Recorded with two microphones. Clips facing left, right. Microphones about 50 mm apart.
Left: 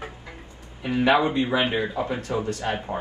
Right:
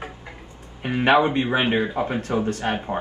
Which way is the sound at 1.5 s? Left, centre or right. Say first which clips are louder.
Right 2 dB; right.